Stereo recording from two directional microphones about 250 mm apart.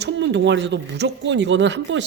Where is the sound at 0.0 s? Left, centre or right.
Right.